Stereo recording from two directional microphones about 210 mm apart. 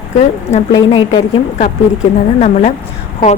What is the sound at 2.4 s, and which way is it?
Speech, 35° left (ahead or behind).